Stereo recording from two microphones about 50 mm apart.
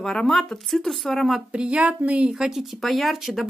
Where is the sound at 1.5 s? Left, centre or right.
Right.